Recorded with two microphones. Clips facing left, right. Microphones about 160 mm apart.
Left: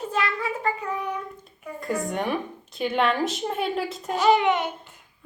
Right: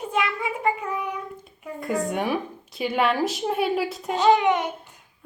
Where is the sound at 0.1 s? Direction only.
15° right (ahead or behind).